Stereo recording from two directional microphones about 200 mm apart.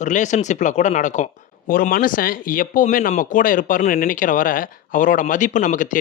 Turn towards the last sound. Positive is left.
turn(degrees=40)  # may be behind; listen again after turning